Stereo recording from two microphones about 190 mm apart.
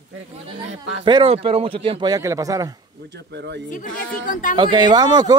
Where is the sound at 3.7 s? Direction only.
40° left (ahead or behind).